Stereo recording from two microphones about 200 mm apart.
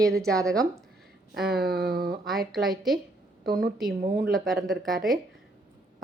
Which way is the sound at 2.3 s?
Centre (ahead or behind).